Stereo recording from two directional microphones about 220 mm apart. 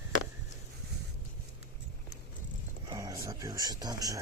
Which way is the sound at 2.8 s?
20° right (ahead or behind).